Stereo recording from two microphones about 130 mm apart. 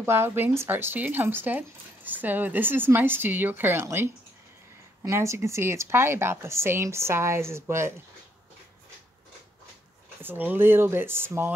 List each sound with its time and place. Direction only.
0.0 s a woman's voice: 20° right (ahead or behind)
10.2 s speech: 15° right (ahead or behind)